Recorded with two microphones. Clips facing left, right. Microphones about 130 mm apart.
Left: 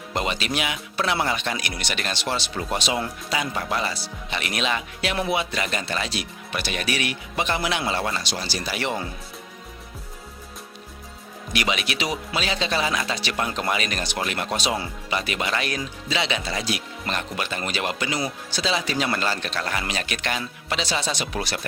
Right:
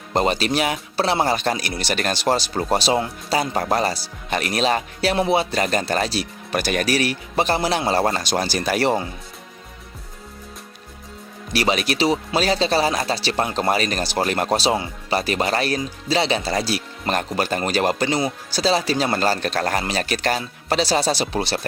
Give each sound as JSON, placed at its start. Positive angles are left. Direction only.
{"t": 0.1, "sound": "speech", "side_deg": -40}
{"t": 11.5, "sound": "speech", "side_deg": -35}